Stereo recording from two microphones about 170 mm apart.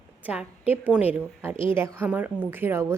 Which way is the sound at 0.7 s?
10° right (ahead or behind).